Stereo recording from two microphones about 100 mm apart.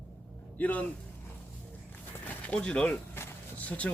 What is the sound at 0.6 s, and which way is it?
Speech, 15° left (ahead or behind).